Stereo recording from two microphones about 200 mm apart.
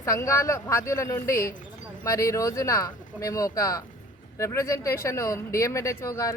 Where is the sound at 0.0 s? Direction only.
15° left (ahead or behind).